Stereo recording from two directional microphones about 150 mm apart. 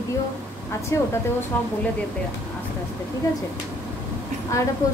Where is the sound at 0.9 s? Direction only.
20° left (ahead or behind).